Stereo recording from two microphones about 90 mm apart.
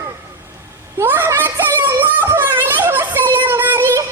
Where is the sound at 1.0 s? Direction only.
20° right (ahead or behind).